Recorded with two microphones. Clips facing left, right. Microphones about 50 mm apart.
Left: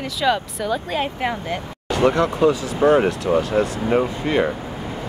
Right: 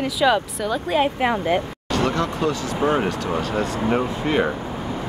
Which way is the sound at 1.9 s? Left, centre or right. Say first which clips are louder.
Left 5 dB; centre.